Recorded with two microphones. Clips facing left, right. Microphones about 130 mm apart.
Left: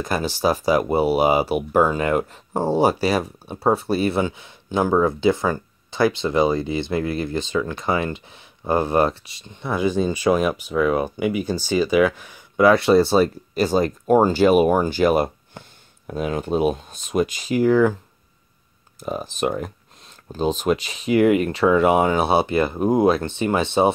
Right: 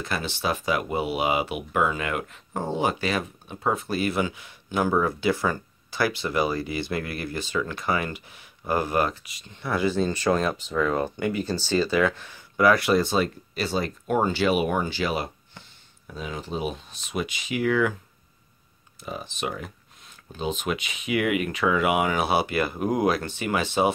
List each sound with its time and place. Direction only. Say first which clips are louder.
0.0 s speech: left 7 dB; 40° left (ahead or behind)
9.5 s speech: left 3 dB; 20° left (ahead or behind); by 17.9 s 35° left (ahead or behind)
18.9 s speech: left 8 dB; 45° left (ahead or behind); by 23.9 s 30° left (ahead or behind)